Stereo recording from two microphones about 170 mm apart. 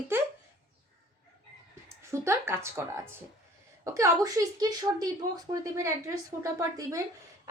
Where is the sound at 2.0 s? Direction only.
15° right (ahead or behind).